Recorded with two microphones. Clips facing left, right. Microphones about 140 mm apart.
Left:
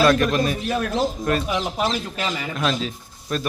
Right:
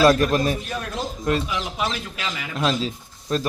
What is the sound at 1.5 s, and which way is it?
Speech, 40° left (ahead or behind).